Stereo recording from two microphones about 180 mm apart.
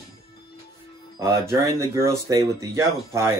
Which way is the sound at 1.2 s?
15° right (ahead or behind).